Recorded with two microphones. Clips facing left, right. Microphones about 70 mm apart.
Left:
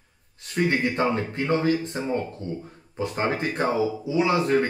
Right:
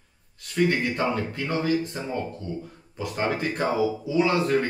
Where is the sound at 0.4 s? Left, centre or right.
Left.